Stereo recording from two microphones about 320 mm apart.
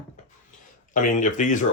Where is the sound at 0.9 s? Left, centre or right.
Left.